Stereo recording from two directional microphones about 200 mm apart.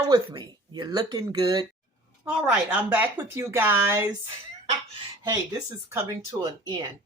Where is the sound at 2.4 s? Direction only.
5° right (ahead or behind).